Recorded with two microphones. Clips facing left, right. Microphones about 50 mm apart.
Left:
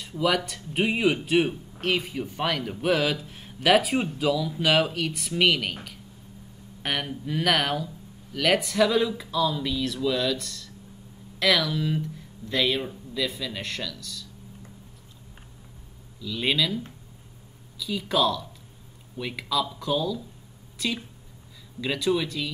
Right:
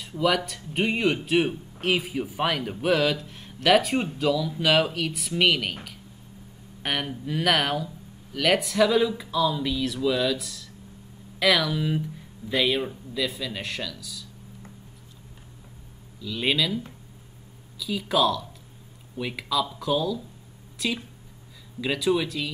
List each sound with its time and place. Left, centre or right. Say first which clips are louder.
0.0 s a man's voice: right 1 dB; centre
16.2 s a man's voice: even; centre